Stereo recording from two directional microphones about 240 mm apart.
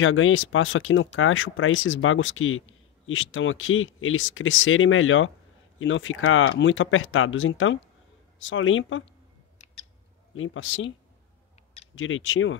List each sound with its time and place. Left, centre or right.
0.0 s speech: left
10.3 s speech: left
11.9 s speech: left